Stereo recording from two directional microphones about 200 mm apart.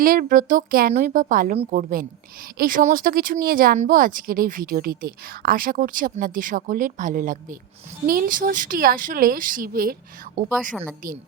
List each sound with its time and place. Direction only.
0.0 s speech: 45° right (ahead or behind)